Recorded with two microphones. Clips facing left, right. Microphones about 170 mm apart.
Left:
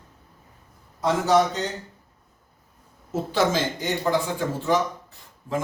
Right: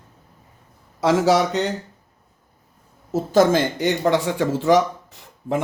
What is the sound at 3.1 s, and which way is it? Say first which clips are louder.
Speech: right 6 dB; 45° right (ahead or behind).